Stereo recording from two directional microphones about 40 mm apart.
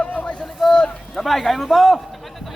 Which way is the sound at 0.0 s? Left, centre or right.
Left.